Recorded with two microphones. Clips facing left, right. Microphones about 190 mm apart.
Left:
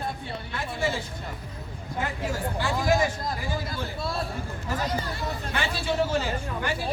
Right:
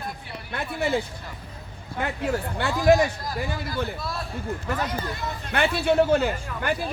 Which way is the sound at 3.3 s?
25° left (ahead or behind).